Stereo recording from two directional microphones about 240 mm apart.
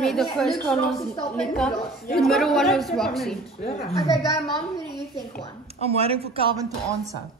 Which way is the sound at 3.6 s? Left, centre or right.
Left.